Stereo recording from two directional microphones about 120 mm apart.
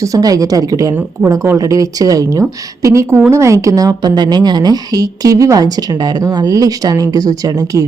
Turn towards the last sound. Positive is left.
turn(degrees=-30)  # may be behind; listen again after turning